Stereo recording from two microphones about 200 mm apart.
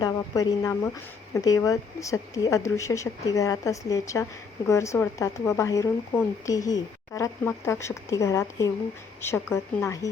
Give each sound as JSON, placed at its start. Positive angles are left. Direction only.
{"t": 0.0, "sound": "speech", "side_deg": 20}